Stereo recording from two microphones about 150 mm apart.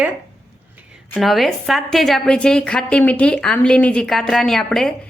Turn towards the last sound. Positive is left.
turn(degrees=0)  # may be behind; listen again after turning